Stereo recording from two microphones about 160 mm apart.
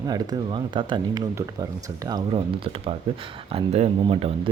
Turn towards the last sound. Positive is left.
turn(degrees=-35)  # may be behind; listen again after turning